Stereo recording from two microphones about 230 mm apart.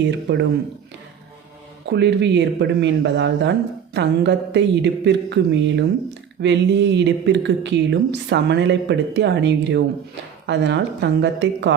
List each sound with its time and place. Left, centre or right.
0.0 s speech: right
1.9 s speech: right